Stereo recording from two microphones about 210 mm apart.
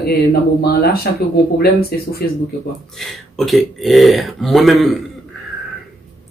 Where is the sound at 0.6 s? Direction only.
50° left (ahead or behind).